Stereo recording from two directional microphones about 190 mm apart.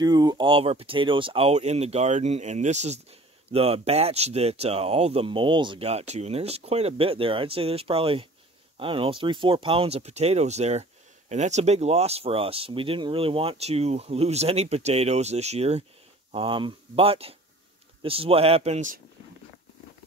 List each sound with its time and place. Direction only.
0.0 s speech: 20° right (ahead or behind); by 18.9 s 35° right (ahead or behind)